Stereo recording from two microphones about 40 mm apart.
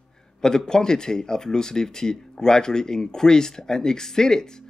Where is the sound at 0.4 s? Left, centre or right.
Centre.